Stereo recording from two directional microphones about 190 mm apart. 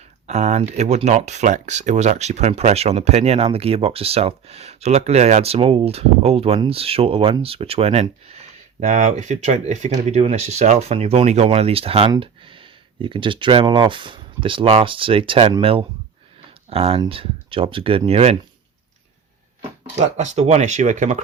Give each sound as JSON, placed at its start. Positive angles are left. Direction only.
{"t": 0.3, "sound": "speech", "side_deg": -35}
{"t": 20.0, "sound": "speech", "side_deg": -35}